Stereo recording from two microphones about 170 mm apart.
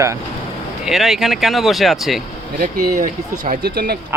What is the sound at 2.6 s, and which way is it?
Speech, 50° right (ahead or behind).